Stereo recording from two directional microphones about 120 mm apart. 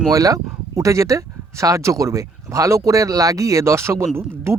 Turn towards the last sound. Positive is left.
turn(degrees=-20)  # may be behind; listen again after turning